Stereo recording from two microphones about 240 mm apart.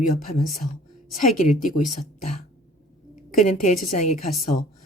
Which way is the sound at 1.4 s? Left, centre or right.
Left.